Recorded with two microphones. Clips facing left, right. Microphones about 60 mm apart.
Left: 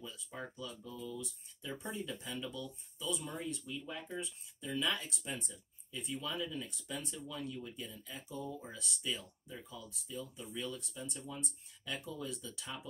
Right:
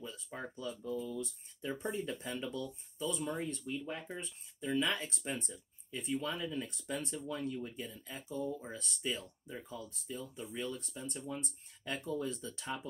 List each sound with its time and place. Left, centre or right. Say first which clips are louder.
0.0 s speech: right 2 dB; right